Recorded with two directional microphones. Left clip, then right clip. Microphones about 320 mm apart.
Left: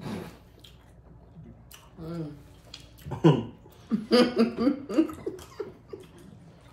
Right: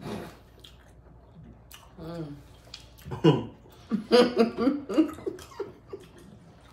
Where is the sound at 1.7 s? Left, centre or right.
Centre.